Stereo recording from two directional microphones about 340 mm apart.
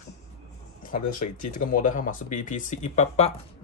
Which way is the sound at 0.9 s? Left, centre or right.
Left.